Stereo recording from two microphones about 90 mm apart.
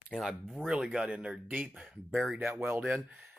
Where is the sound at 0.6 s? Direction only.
10° right (ahead or behind).